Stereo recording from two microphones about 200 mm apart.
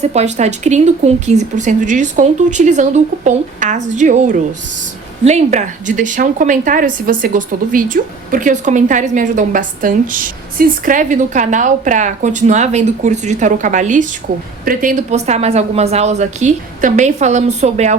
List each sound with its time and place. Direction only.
0.0 s a woman's voice: 35° right (ahead or behind)